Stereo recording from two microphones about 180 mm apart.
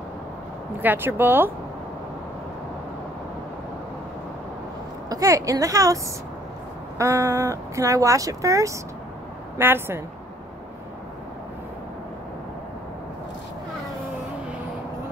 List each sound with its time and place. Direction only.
0.8 s speech: 10° right (ahead or behind)
5.1 s a woman's voice: 20° right (ahead or behind)
7.0 s speech: 15° right (ahead or behind)